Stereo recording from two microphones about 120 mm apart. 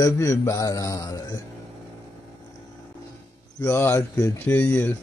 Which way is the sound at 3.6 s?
20° left (ahead or behind).